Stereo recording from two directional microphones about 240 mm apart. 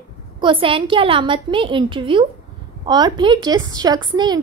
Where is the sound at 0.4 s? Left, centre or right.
Right.